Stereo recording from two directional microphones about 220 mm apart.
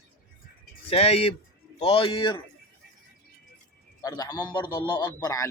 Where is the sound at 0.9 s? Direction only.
25° left (ahead or behind).